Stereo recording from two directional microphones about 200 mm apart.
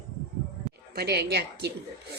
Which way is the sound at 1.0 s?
50° right (ahead or behind).